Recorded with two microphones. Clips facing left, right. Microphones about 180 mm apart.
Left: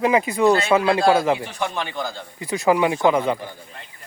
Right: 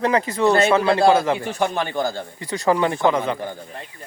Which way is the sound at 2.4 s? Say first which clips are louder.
Left 1 dB; 10° left (ahead or behind).